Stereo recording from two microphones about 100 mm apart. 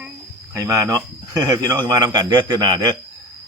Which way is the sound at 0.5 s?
30° right (ahead or behind).